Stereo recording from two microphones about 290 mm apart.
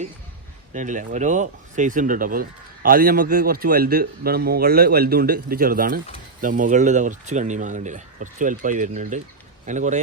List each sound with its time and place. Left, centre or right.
0.7 s speech: right